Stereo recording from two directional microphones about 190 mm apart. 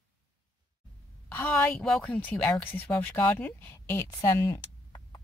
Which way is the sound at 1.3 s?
10° left (ahead or behind).